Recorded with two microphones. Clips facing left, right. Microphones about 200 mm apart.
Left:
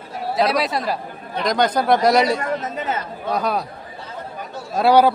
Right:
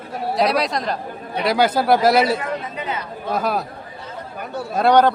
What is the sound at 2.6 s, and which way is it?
Speech, 45° left (ahead or behind).